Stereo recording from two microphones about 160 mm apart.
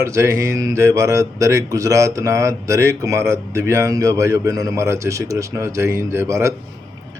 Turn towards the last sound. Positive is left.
turn(degrees=-20)  # may be behind; listen again after turning